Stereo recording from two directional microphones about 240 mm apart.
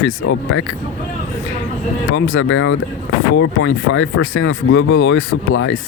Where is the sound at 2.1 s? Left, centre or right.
Left.